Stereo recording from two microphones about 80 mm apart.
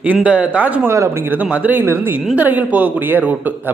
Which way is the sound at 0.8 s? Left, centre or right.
Right.